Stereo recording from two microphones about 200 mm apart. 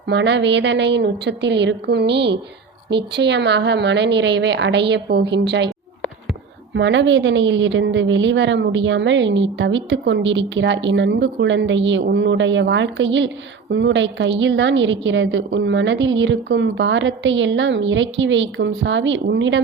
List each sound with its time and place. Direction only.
0.1 s a woman's voice: 60° right (ahead or behind)
6.7 s a woman's voice: 65° right (ahead or behind)